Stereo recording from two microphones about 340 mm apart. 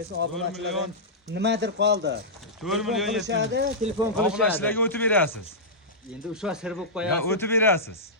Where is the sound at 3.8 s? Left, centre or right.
Centre.